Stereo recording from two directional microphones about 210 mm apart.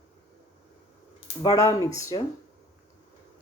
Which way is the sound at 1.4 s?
15° left (ahead or behind).